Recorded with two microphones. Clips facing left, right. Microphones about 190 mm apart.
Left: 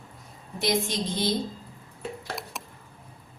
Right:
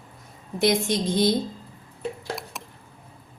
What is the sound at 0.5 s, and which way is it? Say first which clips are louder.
Speech: right 5 dB; 55° right (ahead or behind).